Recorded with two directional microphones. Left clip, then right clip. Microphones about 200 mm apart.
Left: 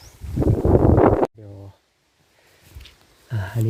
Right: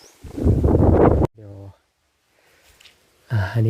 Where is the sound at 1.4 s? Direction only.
15° right (ahead or behind).